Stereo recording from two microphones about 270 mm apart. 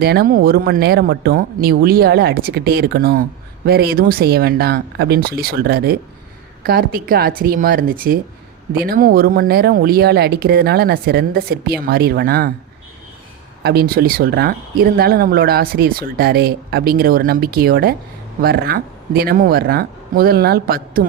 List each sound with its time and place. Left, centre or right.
0.0 s speech: right
13.6 s speech: right